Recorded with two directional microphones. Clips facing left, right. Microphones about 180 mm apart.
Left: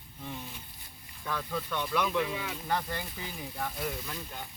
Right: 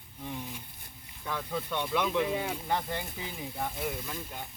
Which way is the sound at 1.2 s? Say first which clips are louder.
Even; 15° right (ahead or behind).